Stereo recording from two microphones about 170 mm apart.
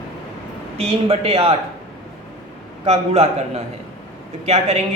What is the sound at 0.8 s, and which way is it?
Speech, 35° right (ahead or behind).